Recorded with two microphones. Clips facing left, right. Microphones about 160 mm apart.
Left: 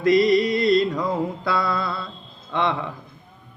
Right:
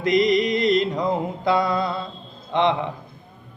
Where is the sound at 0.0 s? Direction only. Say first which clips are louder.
Left 2 dB; 20° right (ahead or behind).